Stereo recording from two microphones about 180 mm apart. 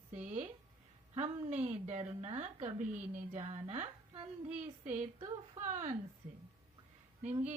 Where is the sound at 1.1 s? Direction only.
40° right (ahead or behind).